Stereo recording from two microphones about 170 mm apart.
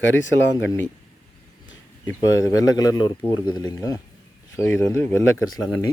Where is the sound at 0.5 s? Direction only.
15° left (ahead or behind).